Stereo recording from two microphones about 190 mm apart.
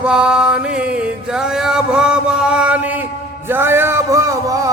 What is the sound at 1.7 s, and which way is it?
Mantra, 5° right (ahead or behind).